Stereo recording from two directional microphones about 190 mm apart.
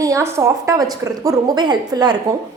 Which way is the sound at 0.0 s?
15° right (ahead or behind).